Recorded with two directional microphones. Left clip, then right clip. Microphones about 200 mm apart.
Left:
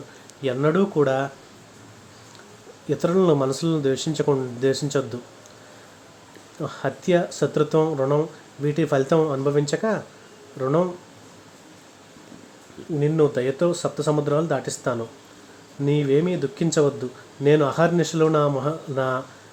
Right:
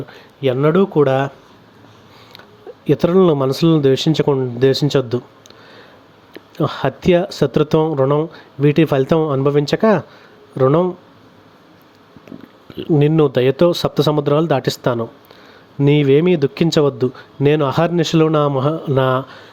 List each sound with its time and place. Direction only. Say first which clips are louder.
0.4 s speech: right 7 dB; 30° right (ahead or behind)
2.8 s speech: right 7 dB; 40° right (ahead or behind)
6.6 s speech: right 9 dB; 40° right (ahead or behind)
13.0 s speech: right 6 dB; 50° right (ahead or behind)